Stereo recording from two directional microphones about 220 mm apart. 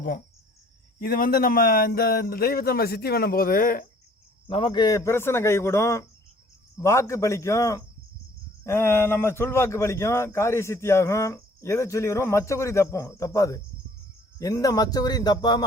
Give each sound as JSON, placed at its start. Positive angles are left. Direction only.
{"t": 0.9, "sound": "speech", "side_deg": 40}
{"t": 4.4, "sound": "a man's voice", "side_deg": 25}